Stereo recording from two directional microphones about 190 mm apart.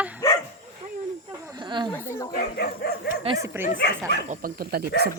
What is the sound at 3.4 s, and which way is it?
Speech, 10° right (ahead or behind).